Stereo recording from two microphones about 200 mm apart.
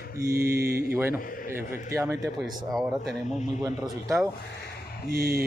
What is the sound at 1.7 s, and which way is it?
Speech, 15° right (ahead or behind).